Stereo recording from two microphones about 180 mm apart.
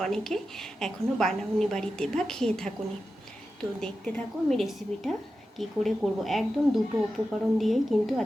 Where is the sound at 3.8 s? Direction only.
5° left (ahead or behind).